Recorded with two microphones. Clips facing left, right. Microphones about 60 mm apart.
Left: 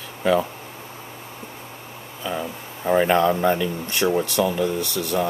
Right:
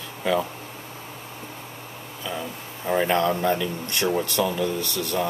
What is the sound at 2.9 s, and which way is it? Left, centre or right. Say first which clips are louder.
Speech: left 4 dB; left.